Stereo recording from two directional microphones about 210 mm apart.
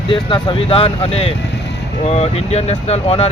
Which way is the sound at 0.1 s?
25° left (ahead or behind).